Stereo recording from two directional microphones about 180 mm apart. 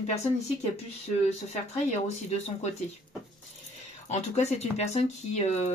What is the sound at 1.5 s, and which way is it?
Speech, 40° left (ahead or behind).